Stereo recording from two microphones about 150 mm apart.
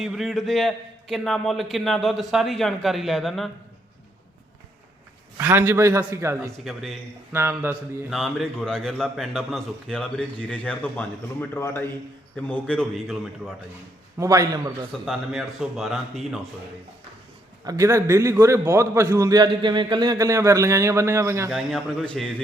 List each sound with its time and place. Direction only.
0.0 s a man's voice: centre (ahead or behind)
5.4 s a man's voice: 15° right (ahead or behind)
6.7 s a man's voice: centre (ahead or behind)
7.3 s a man's voice: 15° right (ahead or behind)
8.1 s a man's voice: 5° left (ahead or behind)
14.2 s a man's voice: 20° right (ahead or behind)
15.0 s a man's voice: centre (ahead or behind)
17.7 s a man's voice: 20° right (ahead or behind)
21.5 s a man's voice: 5° left (ahead or behind)